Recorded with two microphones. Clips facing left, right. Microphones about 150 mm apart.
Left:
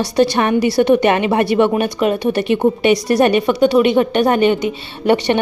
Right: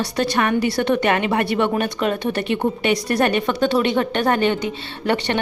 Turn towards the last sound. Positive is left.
turn(degrees=15)  # may be behind; listen again after turning